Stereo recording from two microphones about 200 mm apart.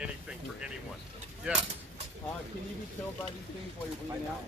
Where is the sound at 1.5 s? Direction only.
5° right (ahead or behind).